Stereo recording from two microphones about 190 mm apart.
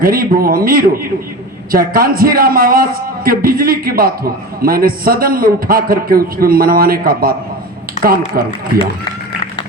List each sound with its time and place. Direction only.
0.0 s a man's voice: 50° right (ahead or behind)
8.4 s a man's voice: 50° right (ahead or behind)